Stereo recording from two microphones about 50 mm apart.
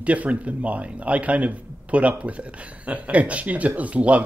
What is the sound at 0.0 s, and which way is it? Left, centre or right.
A man's voice, right.